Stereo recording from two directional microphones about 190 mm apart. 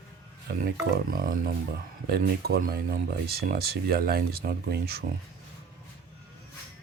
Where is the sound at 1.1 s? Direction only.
50° right (ahead or behind).